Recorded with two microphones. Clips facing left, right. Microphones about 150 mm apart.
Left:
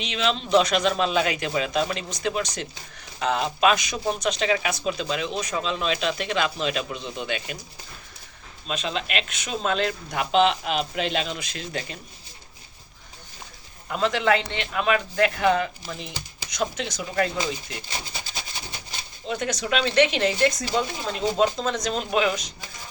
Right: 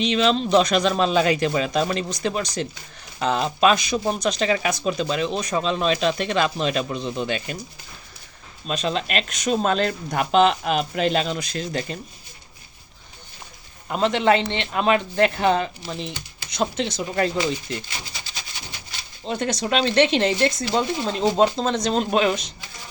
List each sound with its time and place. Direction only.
0.0 s speech: 35° right (ahead or behind)
8.6 s speech: 40° right (ahead or behind)
13.8 s a man's voice: 25° right (ahead or behind)
19.3 s speech: 35° right (ahead or behind)